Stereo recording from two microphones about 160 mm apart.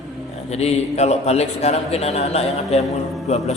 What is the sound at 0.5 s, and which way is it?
A man's voice, 40° left (ahead or behind).